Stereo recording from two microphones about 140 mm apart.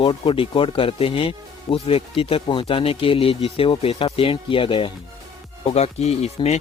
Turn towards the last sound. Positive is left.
turn(degrees=50)  # may be behind; listen again after turning